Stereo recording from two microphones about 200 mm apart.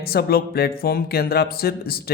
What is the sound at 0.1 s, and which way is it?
Speech, 50° left (ahead or behind).